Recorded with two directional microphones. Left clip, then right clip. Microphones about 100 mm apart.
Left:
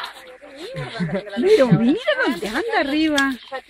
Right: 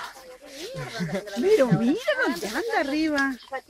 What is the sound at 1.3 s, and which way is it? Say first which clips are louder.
Speech: left 5 dB; 25° left (ahead or behind).